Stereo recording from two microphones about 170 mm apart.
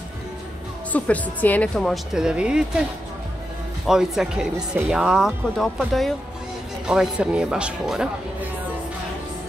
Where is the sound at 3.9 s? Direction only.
5° right (ahead or behind).